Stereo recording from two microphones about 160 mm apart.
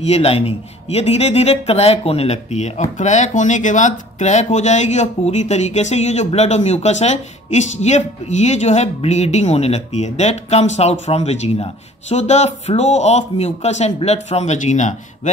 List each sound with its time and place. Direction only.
0.0 s speech: 40° left (ahead or behind)